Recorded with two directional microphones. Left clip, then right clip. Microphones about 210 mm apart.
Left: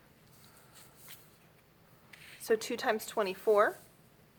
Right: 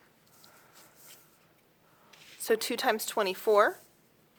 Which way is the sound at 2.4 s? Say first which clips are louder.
Right 3 dB; 35° right (ahead or behind).